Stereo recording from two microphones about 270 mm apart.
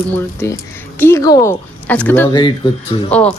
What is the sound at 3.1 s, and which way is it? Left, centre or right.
Speech, centre.